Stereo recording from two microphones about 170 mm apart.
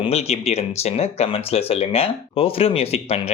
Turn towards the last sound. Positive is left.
turn(degrees=40)  # may be behind; listen again after turning